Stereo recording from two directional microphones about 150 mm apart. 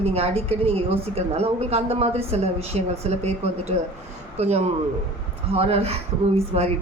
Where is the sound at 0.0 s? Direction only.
40° right (ahead or behind).